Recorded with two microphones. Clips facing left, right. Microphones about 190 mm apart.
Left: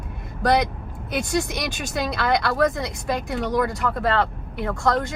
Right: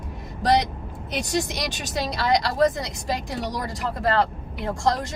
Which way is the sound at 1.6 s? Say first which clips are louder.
Left 1 dB; 55° left (ahead or behind).